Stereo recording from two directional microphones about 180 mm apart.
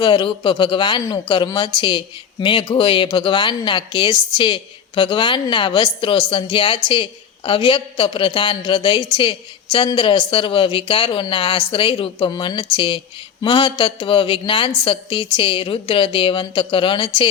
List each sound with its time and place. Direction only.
0.0 s speech: 25° left (ahead or behind)